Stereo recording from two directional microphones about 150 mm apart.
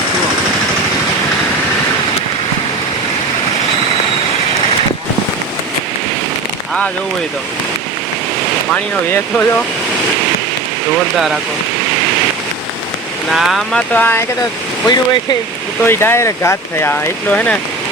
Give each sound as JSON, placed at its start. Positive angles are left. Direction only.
{"t": 8.7, "sound": "speech", "side_deg": 15}
{"t": 10.9, "sound": "speech", "side_deg": -5}
{"t": 13.3, "sound": "speech", "side_deg": 0}
{"t": 13.9, "sound": "speech", "side_deg": 15}
{"t": 14.8, "sound": "speech", "side_deg": 30}
{"t": 15.8, "sound": "speech", "side_deg": 15}